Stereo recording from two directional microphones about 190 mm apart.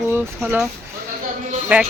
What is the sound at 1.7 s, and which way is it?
Speech, 10° right (ahead or behind).